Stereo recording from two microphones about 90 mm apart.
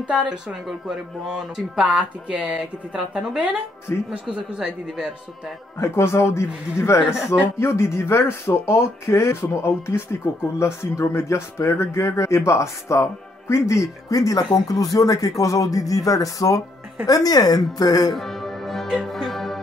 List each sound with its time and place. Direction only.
0.0 s speech: 15° right (ahead or behind)
0.5 s speech: 5° right (ahead or behind)
5.8 s speech: 30° left (ahead or behind)
18.1 s music: centre (ahead or behind)